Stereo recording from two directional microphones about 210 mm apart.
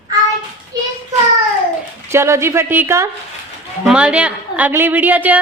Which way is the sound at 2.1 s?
10° right (ahead or behind).